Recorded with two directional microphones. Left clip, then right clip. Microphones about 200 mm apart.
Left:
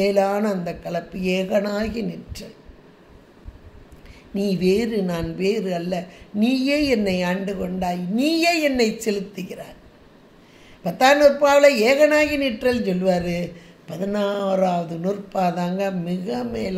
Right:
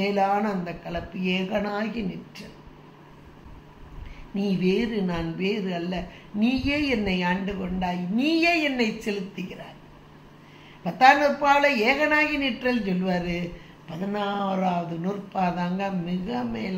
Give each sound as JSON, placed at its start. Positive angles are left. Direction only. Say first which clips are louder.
{"t": 0.0, "sound": "a woman's voice", "louder": "left 4 dB", "side_deg": 55}
{"t": 4.3, "sound": "a woman's voice", "louder": "left 5 dB", "side_deg": 55}
{"t": 10.8, "sound": "a woman's voice", "louder": "left 3 dB", "side_deg": 55}